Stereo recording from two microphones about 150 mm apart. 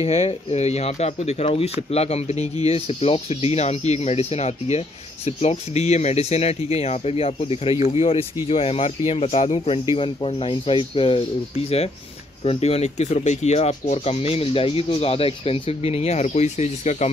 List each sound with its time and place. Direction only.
0.0 s speech: 45° left (ahead or behind)
12.4 s speech: 45° left (ahead or behind)